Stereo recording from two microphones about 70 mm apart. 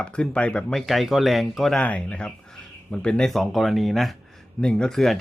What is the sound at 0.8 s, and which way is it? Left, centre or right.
Speech, centre.